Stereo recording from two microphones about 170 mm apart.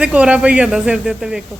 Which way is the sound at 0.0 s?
5° right (ahead or behind).